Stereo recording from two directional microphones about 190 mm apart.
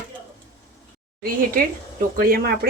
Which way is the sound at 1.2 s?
45° right (ahead or behind).